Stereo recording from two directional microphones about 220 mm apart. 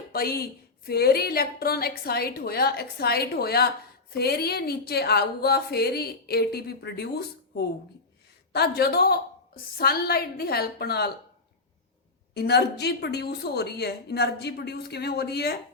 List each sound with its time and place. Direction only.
0.1 s a woman's voice: 45° left (ahead or behind)
12.3 s a woman's voice: 50° left (ahead or behind)